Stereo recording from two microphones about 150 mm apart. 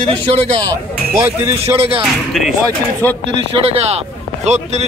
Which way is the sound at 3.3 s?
40° right (ahead or behind).